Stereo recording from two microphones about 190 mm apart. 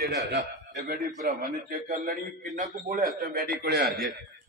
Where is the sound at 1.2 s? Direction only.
45° right (ahead or behind).